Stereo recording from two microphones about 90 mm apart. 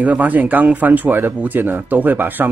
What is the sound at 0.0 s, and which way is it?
Speech, 15° right (ahead or behind).